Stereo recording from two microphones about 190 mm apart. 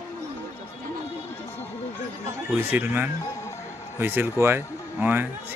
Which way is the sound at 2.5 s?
10° right (ahead or behind).